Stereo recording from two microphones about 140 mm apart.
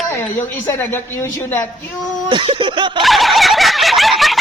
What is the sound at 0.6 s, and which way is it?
Speech, 15° left (ahead or behind).